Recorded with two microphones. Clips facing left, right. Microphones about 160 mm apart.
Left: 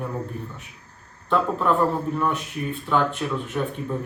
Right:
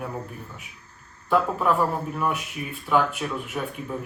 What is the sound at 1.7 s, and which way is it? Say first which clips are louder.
Speech: left 2 dB; 10° right (ahead or behind).